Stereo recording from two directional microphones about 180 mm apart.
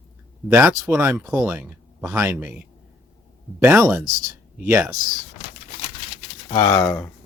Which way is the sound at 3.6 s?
10° right (ahead or behind).